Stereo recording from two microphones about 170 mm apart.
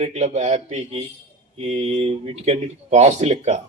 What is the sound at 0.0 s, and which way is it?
Speech, 40° right (ahead or behind).